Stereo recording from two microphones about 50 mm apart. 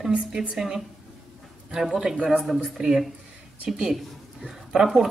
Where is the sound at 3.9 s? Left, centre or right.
Centre.